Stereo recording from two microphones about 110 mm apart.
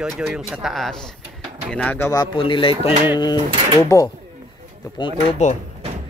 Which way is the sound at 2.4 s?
55° left (ahead or behind).